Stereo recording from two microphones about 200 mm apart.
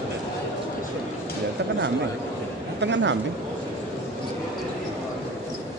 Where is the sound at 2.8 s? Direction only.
65° right (ahead or behind).